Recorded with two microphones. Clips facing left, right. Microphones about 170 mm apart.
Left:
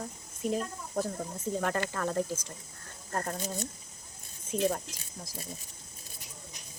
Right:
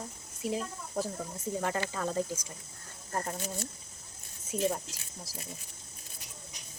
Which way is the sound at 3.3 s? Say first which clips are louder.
Left 2 dB; 20° left (ahead or behind).